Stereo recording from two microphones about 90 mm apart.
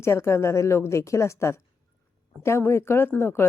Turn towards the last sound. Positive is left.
turn(degrees=25)  # may be behind; listen again after turning